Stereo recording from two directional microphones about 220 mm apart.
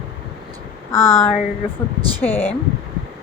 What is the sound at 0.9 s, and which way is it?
Speech, 10° left (ahead or behind).